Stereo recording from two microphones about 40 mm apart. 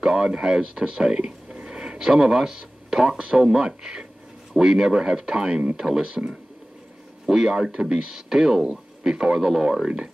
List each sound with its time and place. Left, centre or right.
0.0 s speech: centre
7.2 s speech: centre